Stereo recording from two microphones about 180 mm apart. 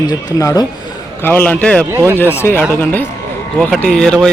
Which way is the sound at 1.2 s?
10° left (ahead or behind).